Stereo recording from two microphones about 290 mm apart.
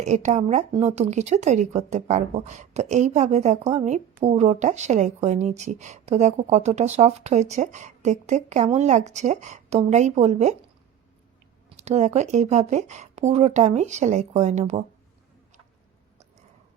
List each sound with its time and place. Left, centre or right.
0.0 s speech: right
11.8 s speech: right